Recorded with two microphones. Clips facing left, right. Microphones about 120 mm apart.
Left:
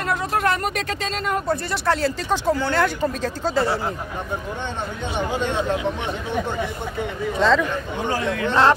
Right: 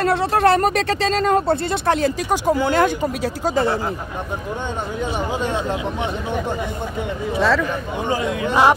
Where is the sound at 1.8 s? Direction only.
20° right (ahead or behind).